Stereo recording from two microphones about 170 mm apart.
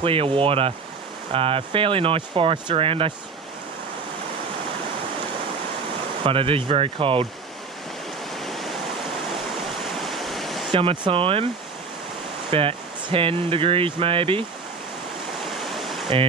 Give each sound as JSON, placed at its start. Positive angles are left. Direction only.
{"t": 0.0, "sound": "speech", "side_deg": -30}
{"t": 6.2, "sound": "speech", "side_deg": -30}
{"t": 8.4, "sound": "waves", "side_deg": 0}
{"t": 10.0, "sound": "waves", "side_deg": 0}
{"t": 10.7, "sound": "speech", "side_deg": -30}
{"t": 12.4, "sound": "speech", "side_deg": -30}
{"t": 15.7, "sound": "waterfall", "side_deg": 0}